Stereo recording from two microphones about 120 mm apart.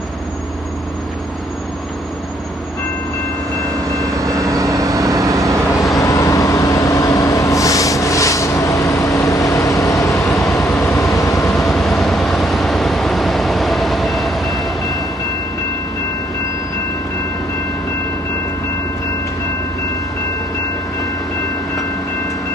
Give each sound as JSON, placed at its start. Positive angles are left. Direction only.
{"t": 4.0, "sound": "vehicle", "side_deg": -25}
{"t": 5.9, "sound": "train", "side_deg": 25}
{"t": 10.5, "sound": "vehicle", "side_deg": 20}
{"t": 11.5, "sound": "vehicle", "side_deg": 0}